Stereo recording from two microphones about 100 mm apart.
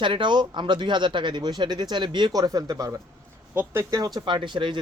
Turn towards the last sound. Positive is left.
turn(degrees=-55)  # may be behind; listen again after turning